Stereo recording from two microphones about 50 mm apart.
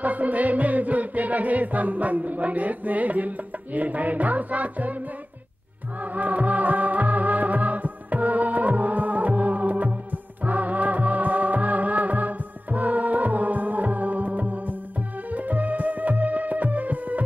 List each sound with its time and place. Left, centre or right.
0.0 s music: right
5.9 s music: right